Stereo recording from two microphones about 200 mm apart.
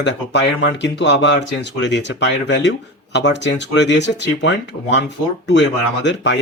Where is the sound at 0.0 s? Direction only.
60° left (ahead or behind).